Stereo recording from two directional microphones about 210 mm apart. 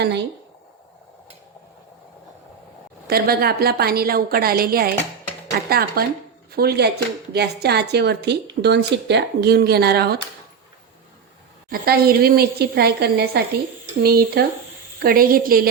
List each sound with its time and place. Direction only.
3.1 s speech: 45° right (ahead or behind)
11.7 s speech: 45° right (ahead or behind)